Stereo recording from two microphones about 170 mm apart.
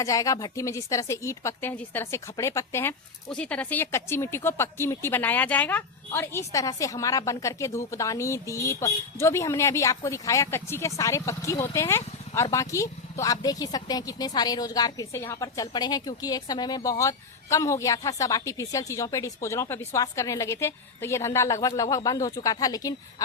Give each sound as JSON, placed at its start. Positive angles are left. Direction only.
{"t": 0.0, "sound": "speech", "side_deg": 20}